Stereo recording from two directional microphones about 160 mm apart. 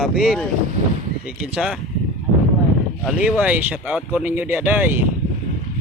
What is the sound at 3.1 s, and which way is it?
Speech, 5° right (ahead or behind).